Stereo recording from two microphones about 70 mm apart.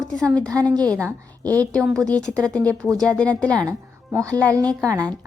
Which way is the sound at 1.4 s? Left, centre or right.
Right.